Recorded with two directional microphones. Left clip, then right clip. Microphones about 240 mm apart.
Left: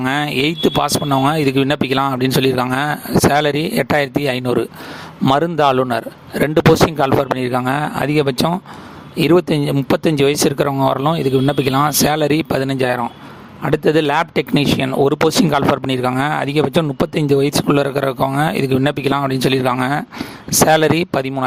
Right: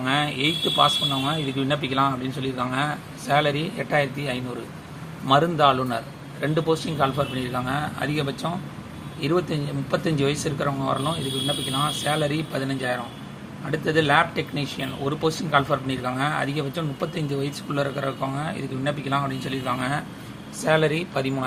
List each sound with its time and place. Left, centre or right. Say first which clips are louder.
0.0 s speech: left 6 dB; left
7.0 s speech: left 8 dB; left